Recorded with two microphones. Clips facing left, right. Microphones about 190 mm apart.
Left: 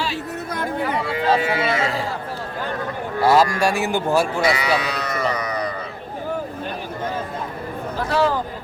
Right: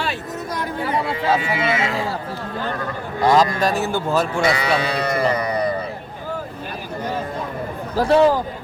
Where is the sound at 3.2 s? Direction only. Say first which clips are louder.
Even; 5° left (ahead or behind).